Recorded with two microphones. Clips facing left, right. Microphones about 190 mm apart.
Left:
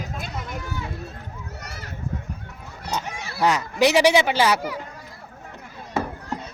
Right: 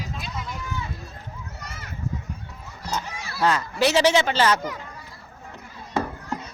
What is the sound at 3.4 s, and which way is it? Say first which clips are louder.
Speech: left 2 dB; 15° left (ahead or behind).